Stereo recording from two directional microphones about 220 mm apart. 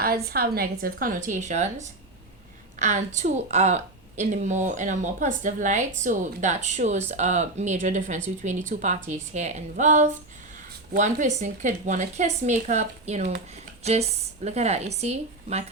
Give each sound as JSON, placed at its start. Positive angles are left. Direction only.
{"t": 0.0, "sound": "a woman's voice", "side_deg": -45}